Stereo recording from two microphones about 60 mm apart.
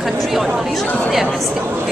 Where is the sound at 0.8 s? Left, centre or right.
Left.